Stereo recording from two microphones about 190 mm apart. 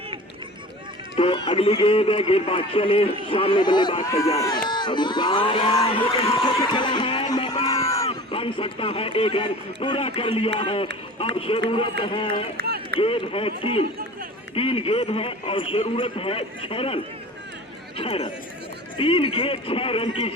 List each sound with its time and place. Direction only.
1.1 s a man's voice: 30° left (ahead or behind)
8.3 s a man's voice: 30° left (ahead or behind)
12.3 s run: 55° right (ahead or behind)
13.0 s a man's voice: 30° left (ahead or behind)